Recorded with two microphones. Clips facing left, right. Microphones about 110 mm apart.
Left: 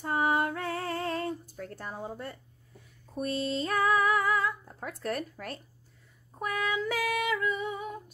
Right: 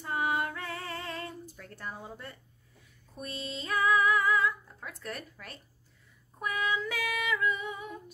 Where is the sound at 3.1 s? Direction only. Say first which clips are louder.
Left 9 dB; 45° left (ahead or behind).